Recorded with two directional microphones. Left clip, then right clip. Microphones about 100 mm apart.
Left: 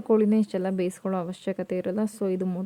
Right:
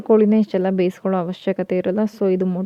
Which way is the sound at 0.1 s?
35° right (ahead or behind).